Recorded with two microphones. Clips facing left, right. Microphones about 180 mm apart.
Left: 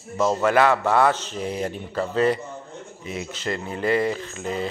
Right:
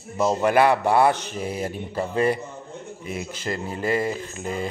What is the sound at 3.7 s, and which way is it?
Speech, 40° right (ahead or behind).